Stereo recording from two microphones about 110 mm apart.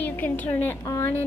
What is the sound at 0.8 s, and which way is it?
Speech, 30° left (ahead or behind).